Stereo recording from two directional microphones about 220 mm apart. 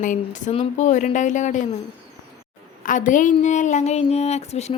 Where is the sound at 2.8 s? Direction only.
35° left (ahead or behind).